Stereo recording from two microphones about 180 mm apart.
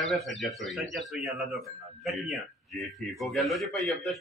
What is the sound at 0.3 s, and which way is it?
Speech, centre (ahead or behind).